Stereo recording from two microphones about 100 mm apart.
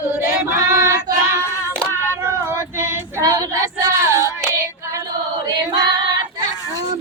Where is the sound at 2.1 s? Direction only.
25° right (ahead or behind).